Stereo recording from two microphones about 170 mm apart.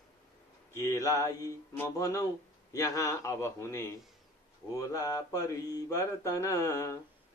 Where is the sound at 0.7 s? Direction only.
15° left (ahead or behind).